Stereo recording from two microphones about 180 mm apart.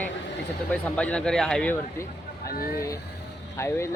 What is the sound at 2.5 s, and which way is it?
Speech, 55° left (ahead or behind).